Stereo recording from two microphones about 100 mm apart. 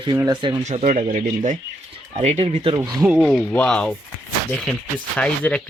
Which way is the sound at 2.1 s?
80° right.